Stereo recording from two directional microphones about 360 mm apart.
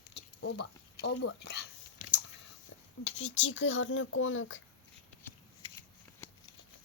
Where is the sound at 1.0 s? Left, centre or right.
Left.